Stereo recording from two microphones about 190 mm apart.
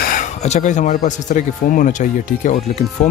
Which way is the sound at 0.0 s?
45° left (ahead or behind).